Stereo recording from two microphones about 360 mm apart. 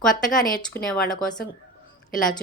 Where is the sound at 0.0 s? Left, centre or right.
Centre.